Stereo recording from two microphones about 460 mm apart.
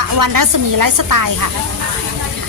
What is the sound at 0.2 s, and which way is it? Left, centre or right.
A woman's voice, right.